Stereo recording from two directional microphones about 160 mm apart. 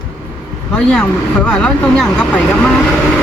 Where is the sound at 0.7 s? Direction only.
5° left (ahead or behind).